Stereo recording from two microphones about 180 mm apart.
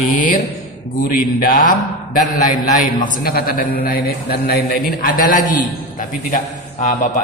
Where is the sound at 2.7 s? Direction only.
50° left (ahead or behind).